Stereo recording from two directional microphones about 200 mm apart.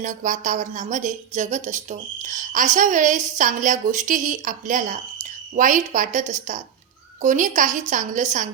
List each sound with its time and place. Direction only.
0.0 s a woman's voice: 40° right (ahead or behind)